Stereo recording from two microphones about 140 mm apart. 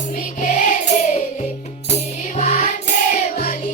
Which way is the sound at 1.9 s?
50° left (ahead or behind).